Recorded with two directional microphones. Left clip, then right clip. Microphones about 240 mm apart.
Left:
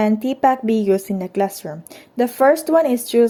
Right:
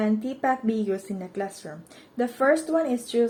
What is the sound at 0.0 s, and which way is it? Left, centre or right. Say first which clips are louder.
Speech: left 9 dB; left.